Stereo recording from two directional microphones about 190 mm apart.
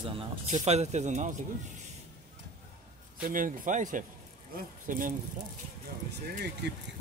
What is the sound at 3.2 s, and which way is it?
Speech, 45° right (ahead or behind).